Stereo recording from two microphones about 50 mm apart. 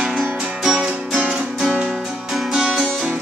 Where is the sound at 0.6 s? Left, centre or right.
Centre.